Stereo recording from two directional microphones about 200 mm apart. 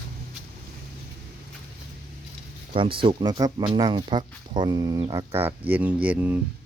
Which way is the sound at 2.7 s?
25° right (ahead or behind).